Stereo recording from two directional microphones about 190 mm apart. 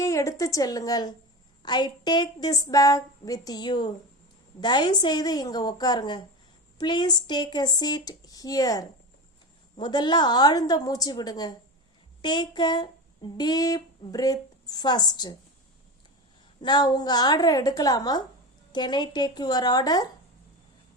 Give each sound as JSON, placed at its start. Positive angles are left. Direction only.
{"t": 0.0, "sound": "a woman's voice", "side_deg": 15}
{"t": 16.6, "sound": "speech", "side_deg": 25}